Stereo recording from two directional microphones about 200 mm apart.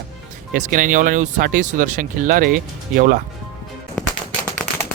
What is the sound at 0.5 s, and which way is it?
Speech, 40° right (ahead or behind).